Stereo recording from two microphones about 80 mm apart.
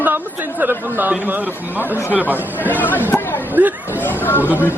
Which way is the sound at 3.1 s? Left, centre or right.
Left.